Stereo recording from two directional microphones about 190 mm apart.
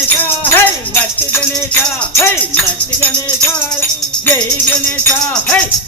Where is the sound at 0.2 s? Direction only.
10° left (ahead or behind).